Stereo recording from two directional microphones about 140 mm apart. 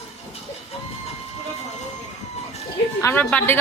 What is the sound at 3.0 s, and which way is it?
Speech, 15° left (ahead or behind).